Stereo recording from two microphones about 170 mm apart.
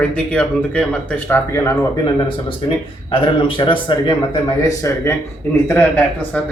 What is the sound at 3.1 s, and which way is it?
A man's voice, 30° left (ahead or behind).